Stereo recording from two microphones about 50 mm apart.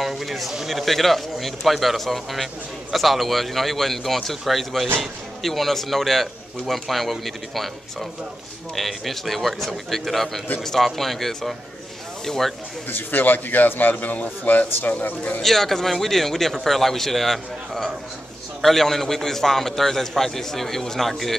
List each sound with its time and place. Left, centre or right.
0.0 s speech: centre
12.9 s a man's voice: left
15.4 s speech: centre